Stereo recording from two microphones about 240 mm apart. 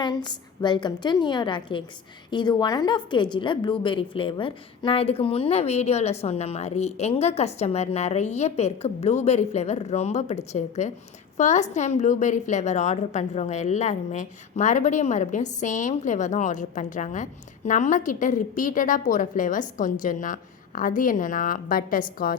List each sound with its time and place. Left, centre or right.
0.0 s a woman's voice: centre; by 22.4 s left